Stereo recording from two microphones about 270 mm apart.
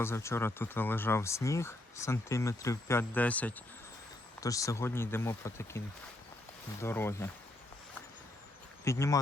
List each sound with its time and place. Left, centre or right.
0.0 s speech: centre
6.8 s speech: centre
8.8 s speech: centre